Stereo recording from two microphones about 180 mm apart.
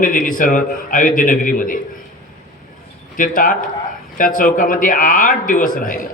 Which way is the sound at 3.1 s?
50° left (ahead or behind).